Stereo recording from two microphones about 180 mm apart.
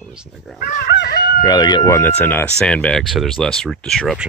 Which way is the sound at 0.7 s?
50° left (ahead or behind).